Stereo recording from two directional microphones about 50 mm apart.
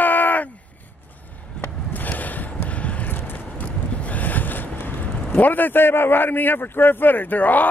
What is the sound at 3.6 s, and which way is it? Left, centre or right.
Vehicle, left.